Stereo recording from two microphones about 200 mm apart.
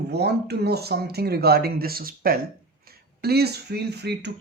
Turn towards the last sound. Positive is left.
turn(degrees=-55)  # may be behind; listen again after turning